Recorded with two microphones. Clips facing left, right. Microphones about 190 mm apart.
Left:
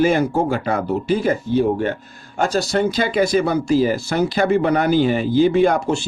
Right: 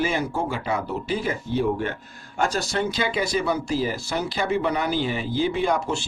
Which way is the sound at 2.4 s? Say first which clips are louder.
Left 6 dB; 35° left (ahead or behind).